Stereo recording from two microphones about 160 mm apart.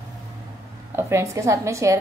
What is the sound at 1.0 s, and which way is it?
A woman's voice, 15° right (ahead or behind).